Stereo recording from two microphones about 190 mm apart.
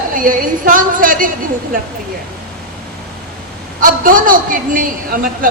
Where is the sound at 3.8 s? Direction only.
45° right (ahead or behind).